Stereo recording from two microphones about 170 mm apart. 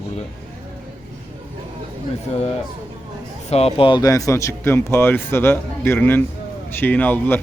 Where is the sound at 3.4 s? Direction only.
40° left (ahead or behind).